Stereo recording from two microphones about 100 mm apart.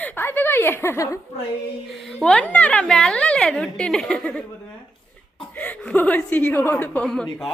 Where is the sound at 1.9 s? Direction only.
Centre (ahead or behind).